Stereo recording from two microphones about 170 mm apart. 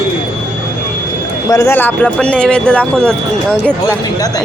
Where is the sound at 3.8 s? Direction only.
20° left (ahead or behind).